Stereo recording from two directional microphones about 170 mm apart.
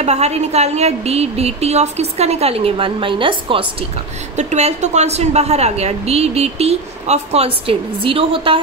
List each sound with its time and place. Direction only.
0.0 s a woman's voice: 40° right (ahead or behind)
4.4 s a woman's voice: 40° right (ahead or behind)